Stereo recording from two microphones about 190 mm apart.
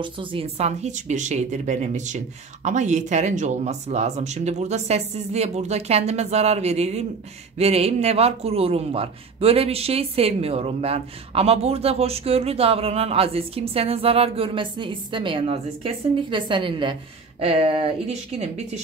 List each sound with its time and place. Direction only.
0.0 s a man's voice: 25° right (ahead or behind)